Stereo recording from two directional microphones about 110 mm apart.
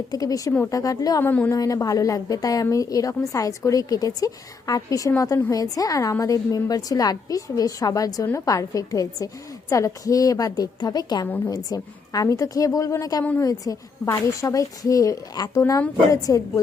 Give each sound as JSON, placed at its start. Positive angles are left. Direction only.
{"t": 0.1, "sound": "a woman's voice", "side_deg": 30}
{"t": 1.2, "sound": "a woman's voice", "side_deg": 15}
{"t": 1.5, "sound": "a woman's voice", "side_deg": 35}
{"t": 11.3, "sound": "a woman's voice", "side_deg": 15}
{"t": 11.5, "sound": "a woman's voice", "side_deg": 35}